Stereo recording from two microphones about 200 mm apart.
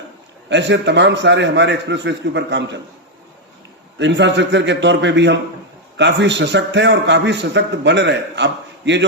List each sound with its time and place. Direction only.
0.5 s a man's voice: 60° right (ahead or behind)
3.9 s a man's voice: 60° right (ahead or behind)